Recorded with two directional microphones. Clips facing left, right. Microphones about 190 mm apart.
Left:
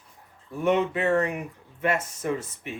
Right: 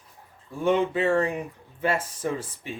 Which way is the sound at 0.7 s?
30° right (ahead or behind).